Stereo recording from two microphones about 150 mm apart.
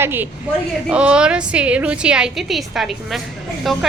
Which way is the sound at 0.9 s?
5° right (ahead or behind).